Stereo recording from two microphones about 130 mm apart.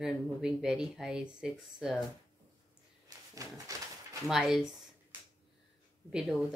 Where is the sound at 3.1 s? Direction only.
30° right (ahead or behind).